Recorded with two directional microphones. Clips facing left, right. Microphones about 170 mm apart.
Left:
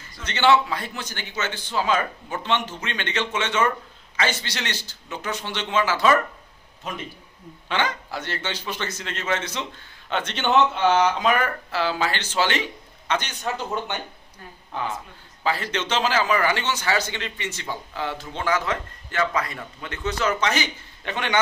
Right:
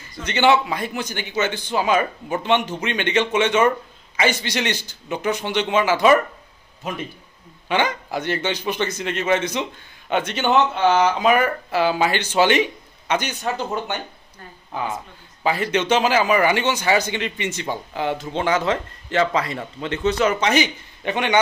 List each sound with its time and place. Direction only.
0.1 s a man's voice: 15° right (ahead or behind)